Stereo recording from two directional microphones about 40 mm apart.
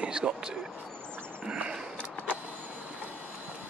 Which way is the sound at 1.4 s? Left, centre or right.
Right.